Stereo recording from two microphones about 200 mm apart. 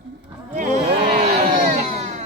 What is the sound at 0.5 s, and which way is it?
Speech, 35° right (ahead or behind).